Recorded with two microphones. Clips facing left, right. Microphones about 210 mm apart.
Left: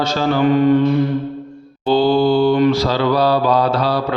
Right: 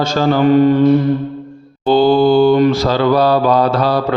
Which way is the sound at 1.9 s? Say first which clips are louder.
Right 3 dB; 50° right (ahead or behind).